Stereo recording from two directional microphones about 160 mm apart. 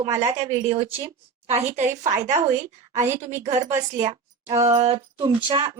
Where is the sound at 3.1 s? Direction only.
15° right (ahead or behind).